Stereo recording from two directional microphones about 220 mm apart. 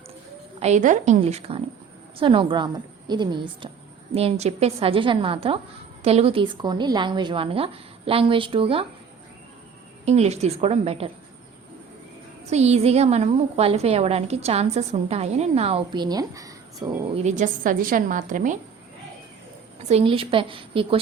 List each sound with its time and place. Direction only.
0.6 s a woman's voice: 35° right (ahead or behind)
10.1 s a woman's voice: 30° right (ahead or behind)
12.5 s a woman's voice: 30° right (ahead or behind)
17.2 s a woman's voice: 35° right (ahead or behind)
19.9 s a woman's voice: 25° right (ahead or behind)